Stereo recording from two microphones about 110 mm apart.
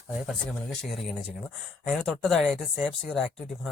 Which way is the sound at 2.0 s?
5° left (ahead or behind).